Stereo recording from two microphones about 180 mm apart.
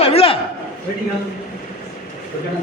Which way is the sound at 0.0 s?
35° left (ahead or behind).